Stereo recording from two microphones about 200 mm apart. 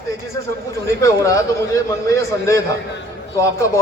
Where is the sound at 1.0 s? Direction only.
15° left (ahead or behind).